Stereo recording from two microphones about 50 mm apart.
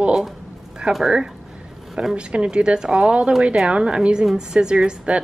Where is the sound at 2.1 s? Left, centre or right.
Right.